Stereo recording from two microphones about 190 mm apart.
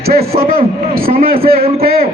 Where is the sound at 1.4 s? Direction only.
50° right (ahead or behind).